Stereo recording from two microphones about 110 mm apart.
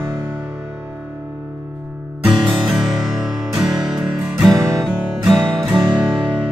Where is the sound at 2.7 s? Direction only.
5° right (ahead or behind).